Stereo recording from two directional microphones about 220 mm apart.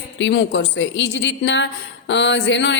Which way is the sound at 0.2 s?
55° left (ahead or behind).